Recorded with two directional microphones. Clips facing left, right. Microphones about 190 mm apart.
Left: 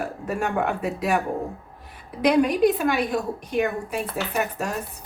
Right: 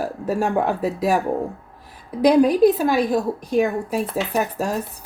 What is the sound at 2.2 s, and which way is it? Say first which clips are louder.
A woman's voice: right 5 dB; 35° right (ahead or behind).